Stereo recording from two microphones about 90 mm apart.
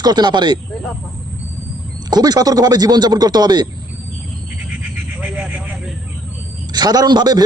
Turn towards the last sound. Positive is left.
turn(degrees=-50)  # may be behind; listen again after turning